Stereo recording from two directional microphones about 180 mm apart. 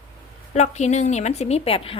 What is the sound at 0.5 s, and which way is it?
A woman's voice, 40° left (ahead or behind).